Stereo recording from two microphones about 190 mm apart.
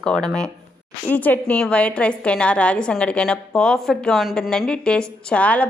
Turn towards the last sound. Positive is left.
turn(degrees=5)  # may be behind; listen again after turning